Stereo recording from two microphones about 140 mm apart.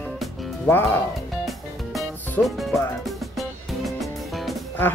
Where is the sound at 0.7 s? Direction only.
20° left (ahead or behind).